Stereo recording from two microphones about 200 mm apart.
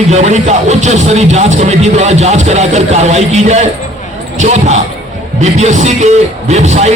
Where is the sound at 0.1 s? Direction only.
35° right (ahead or behind).